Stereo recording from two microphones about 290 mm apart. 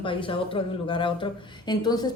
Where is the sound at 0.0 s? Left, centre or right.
Centre.